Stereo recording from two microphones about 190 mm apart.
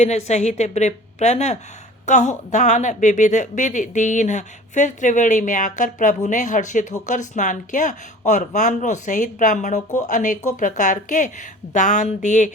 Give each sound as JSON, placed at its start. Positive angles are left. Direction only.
{"t": 0.0, "sound": "a woman's voice", "side_deg": 35}